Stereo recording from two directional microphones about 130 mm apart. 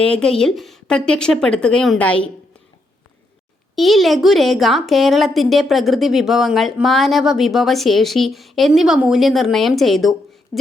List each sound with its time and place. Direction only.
0.0 s a woman's voice: 5° left (ahead or behind)
3.8 s a woman's voice: centre (ahead or behind)